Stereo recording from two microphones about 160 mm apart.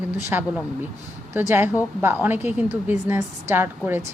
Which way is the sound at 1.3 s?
15° right (ahead or behind).